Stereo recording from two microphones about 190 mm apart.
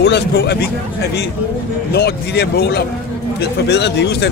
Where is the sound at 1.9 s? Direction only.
60° left (ahead or behind).